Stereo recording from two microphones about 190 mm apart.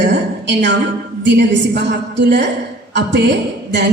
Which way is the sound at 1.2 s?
65° right (ahead or behind).